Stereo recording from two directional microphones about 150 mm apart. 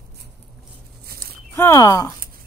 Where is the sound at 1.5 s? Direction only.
20° left (ahead or behind).